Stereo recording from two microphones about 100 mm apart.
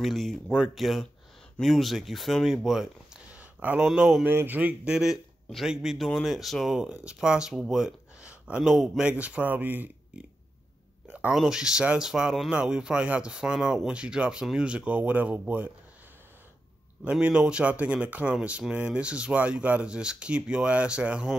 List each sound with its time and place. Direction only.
0.0 s a man's voice: centre (ahead or behind)
4.3 s a man's voice: 20° right (ahead or behind)
11.1 s a sound: 15° right (ahead or behind)
11.3 s speech: 5° right (ahead or behind)
17.0 s speech: 10° right (ahead or behind)